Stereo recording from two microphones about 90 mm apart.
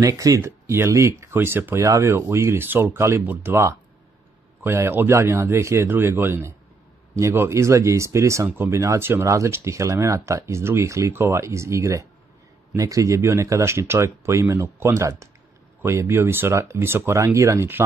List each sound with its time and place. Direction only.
0.0 s speech: 40° right (ahead or behind)
0.4 s speech: 30° right (ahead or behind)